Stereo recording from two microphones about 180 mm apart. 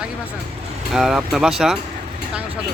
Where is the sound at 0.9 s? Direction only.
Centre (ahead or behind).